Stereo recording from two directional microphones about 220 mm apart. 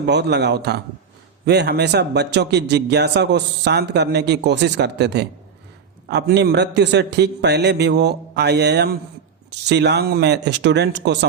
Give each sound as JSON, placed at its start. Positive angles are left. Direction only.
{"t": 0.0, "sound": "a man's voice", "side_deg": -50}